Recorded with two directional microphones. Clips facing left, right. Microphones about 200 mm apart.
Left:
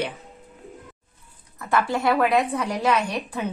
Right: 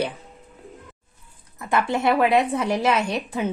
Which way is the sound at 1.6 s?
20° right (ahead or behind).